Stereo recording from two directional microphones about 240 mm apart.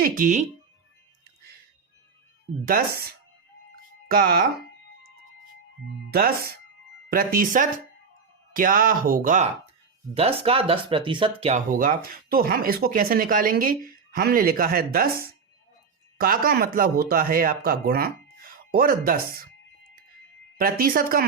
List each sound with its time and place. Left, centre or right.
0.0 s speech: right
2.6 s speech: right
6.1 s speech: right
20.6 s speech: right